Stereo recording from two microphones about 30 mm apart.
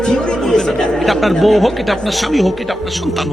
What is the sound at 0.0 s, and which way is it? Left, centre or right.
Speech, left.